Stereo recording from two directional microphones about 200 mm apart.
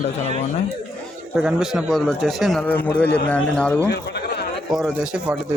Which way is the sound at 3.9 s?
55° left (ahead or behind).